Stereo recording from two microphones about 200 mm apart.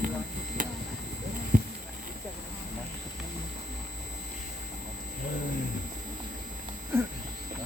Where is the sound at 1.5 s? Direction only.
40° right (ahead or behind).